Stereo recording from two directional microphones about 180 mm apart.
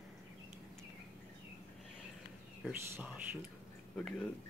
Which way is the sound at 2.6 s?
5° right (ahead or behind).